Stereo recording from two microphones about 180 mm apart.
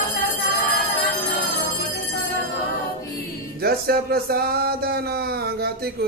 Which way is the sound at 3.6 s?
60° right (ahead or behind).